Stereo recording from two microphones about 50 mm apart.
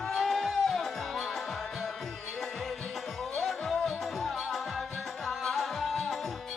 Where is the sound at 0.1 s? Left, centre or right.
Centre.